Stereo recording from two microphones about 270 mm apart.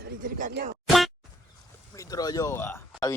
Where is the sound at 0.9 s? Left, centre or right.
Centre.